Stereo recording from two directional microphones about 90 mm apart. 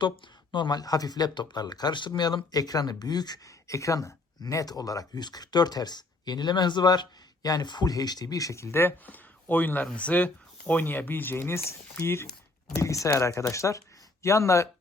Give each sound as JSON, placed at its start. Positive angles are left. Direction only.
{"t": 0.5, "sound": "speech", "side_deg": 55}